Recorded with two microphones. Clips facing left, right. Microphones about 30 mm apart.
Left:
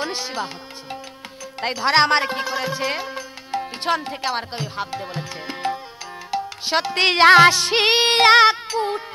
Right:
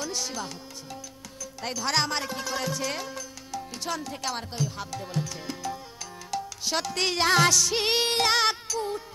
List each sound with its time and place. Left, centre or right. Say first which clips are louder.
0.0 s speech: left 6 dB; left
1.6 s music: left 10 dB; left
2.5 s speech: left 6 dB; left
6.3 s music: left 7 dB; left